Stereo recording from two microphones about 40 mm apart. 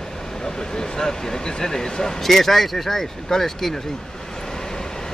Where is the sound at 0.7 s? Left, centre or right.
Centre.